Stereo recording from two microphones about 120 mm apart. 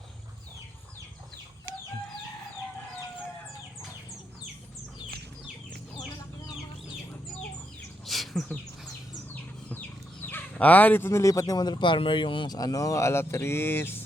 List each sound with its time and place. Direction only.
8.0 s a sound: centre (ahead or behind)
9.3 s bird: 15° left (ahead or behind)
10.2 s speech: 15° left (ahead or behind)